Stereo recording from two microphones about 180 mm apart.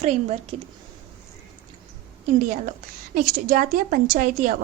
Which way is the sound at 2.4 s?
45° right (ahead or behind).